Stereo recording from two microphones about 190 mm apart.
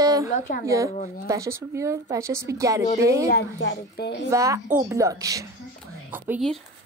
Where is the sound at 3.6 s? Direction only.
70° left (ahead or behind).